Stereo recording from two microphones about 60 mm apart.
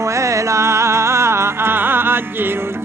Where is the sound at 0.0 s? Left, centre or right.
Right.